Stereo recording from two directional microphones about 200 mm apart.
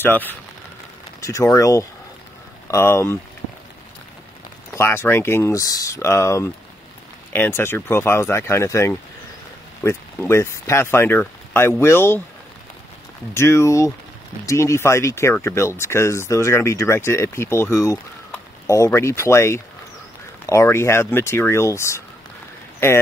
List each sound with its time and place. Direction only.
0.0 s speech: 10° left (ahead or behind)
4.7 s speech: 10° left (ahead or behind)
13.3 s speech: 15° left (ahead or behind)